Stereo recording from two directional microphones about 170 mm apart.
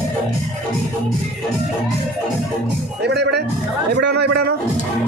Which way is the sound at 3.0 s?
80° right.